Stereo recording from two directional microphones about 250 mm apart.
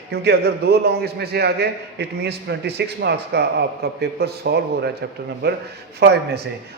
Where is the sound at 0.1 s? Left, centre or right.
Right.